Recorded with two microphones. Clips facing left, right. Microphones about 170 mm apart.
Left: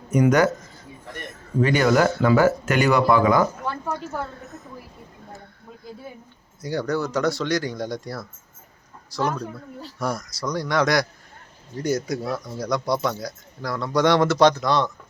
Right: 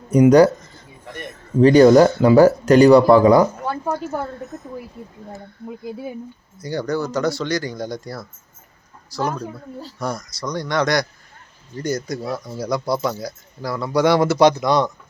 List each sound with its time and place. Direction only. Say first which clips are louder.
0.3 s speech: right 8 dB; 35° right (ahead or behind)
1.6 s speech: right 9 dB; 35° right (ahead or behind)
6.6 s speech: right 2 dB; centre (ahead or behind)